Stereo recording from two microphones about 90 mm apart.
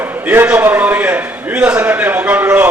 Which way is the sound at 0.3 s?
20° right (ahead or behind).